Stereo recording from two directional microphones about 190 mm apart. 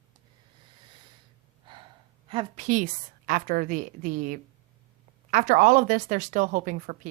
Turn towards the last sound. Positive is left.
turn(degrees=-45)  # may be behind; listen again after turning